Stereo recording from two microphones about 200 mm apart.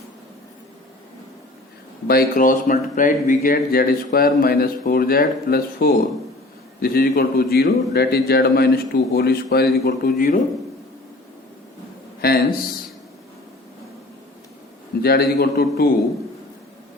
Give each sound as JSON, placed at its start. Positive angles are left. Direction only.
{"t": 2.0, "sound": "speech", "side_deg": 45}
{"t": 12.2, "sound": "a sound", "side_deg": 50}
{"t": 15.0, "sound": "speech", "side_deg": 50}